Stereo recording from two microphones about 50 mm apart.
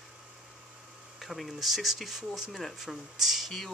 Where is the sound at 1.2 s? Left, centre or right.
Centre.